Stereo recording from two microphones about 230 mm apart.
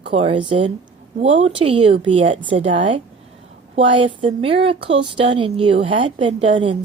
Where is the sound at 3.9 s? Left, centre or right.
Right.